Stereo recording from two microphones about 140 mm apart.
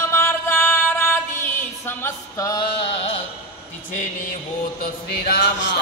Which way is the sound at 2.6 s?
40° left (ahead or behind).